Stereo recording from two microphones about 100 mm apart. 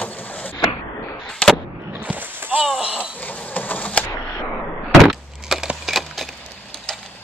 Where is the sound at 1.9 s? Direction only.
15° right (ahead or behind).